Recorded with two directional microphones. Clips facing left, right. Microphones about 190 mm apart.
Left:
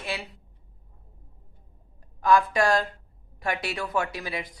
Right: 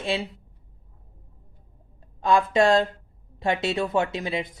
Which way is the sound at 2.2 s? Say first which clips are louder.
Right 2 dB; 25° right (ahead or behind).